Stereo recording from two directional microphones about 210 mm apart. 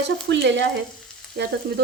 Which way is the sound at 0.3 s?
55° right (ahead or behind).